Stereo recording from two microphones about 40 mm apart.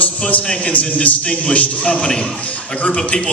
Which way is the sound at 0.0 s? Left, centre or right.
Left.